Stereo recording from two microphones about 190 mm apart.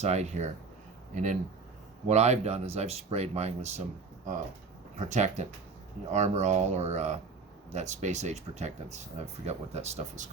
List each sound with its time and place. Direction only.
0.0 s speech: 35° right (ahead or behind)
4.9 s speech: 40° right (ahead or behind)